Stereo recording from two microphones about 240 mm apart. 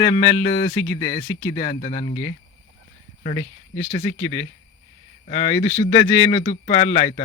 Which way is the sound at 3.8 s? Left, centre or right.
Left.